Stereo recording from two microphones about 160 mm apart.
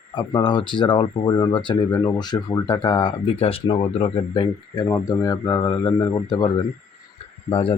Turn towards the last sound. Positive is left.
turn(degrees=35)  # may be behind; listen again after turning